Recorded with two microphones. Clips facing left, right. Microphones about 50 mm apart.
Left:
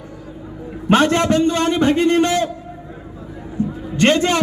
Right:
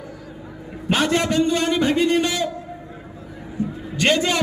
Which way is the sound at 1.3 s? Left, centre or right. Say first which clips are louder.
Left 3 dB; left.